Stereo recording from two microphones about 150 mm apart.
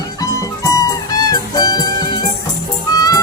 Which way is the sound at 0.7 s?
25° left (ahead or behind).